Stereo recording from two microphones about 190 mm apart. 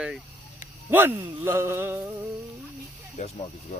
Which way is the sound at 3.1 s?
35° left (ahead or behind).